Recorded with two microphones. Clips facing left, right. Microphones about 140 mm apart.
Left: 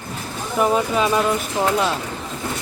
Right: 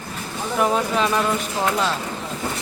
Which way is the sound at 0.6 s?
5° left (ahead or behind).